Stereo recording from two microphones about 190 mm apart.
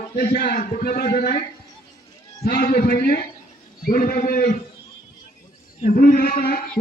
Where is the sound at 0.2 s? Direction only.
50° left (ahead or behind).